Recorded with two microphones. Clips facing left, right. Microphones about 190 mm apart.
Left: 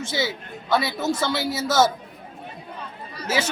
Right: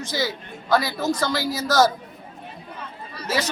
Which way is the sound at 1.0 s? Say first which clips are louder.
Right 1 dB; 25° left (ahead or behind).